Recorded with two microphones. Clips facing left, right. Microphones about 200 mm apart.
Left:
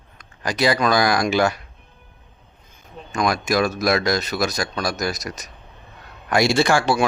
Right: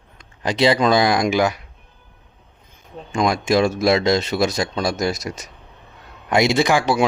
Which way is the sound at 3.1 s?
25° right (ahead or behind).